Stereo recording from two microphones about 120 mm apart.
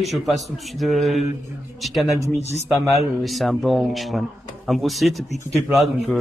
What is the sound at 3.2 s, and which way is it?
Speech, centre (ahead or behind).